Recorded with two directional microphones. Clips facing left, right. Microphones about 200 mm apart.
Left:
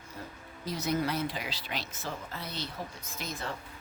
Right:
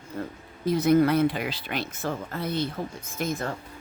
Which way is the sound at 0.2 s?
55° right (ahead or behind).